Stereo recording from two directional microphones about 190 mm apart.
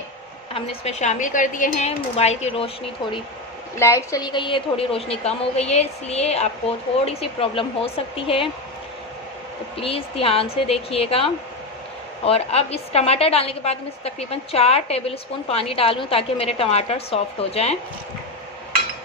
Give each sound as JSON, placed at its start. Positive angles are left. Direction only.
{"t": 0.6, "sound": "a woman's voice", "side_deg": 35}
{"t": 3.7, "sound": "a woman's voice", "side_deg": 15}
{"t": 9.8, "sound": "a woman's voice", "side_deg": 30}